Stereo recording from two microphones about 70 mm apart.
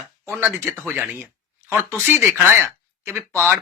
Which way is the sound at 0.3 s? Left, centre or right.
Right.